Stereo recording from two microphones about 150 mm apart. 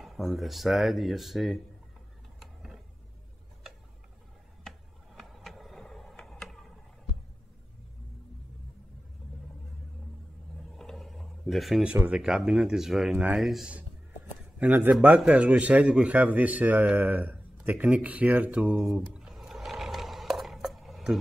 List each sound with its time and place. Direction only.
0.0 s speech: centre (ahead or behind)
2.4 s mechanisms: 5° right (ahead or behind)
4.6 s a sound: centre (ahead or behind)
10.7 s a man's voice: centre (ahead or behind)